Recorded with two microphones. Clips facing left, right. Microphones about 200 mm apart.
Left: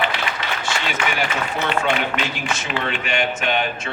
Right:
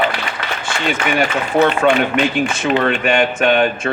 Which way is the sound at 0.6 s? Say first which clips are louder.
Right 6 dB; 55° right (ahead or behind).